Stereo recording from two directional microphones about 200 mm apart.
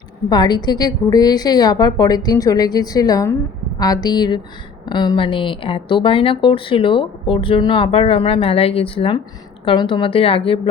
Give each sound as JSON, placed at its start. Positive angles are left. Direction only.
{"t": 0.3, "sound": "speech", "side_deg": 20}